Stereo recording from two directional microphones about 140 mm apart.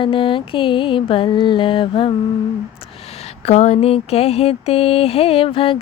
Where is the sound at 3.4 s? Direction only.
50° left (ahead or behind).